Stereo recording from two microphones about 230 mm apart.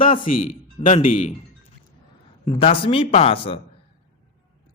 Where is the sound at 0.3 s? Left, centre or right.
Left.